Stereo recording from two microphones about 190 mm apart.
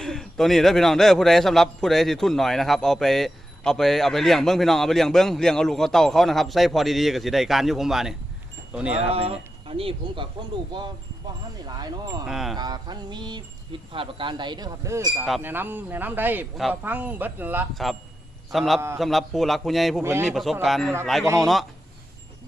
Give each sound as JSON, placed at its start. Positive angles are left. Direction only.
{"t": 0.0, "sound": "a man's voice", "side_deg": 0}
{"t": 9.1, "sound": "speech", "side_deg": -30}
{"t": 12.2, "sound": "a man's voice", "side_deg": 0}
{"t": 12.5, "sound": "a man's voice", "side_deg": -20}
{"t": 20.0, "sound": "a man's voice", "side_deg": -10}
{"t": 20.3, "sound": "a man's voice", "side_deg": 0}